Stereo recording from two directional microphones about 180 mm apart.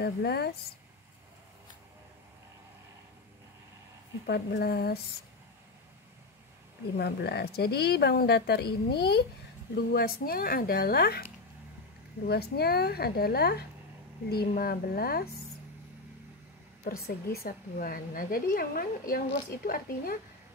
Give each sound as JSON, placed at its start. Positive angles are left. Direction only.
{"t": 0.0, "sound": "a woman's voice", "side_deg": 65}
{"t": 4.3, "sound": "a woman's voice", "side_deg": 65}
{"t": 7.0, "sound": "a woman's voice", "side_deg": 65}
{"t": 12.3, "sound": "a woman's voice", "side_deg": 60}
{"t": 16.8, "sound": "a woman's voice", "side_deg": 55}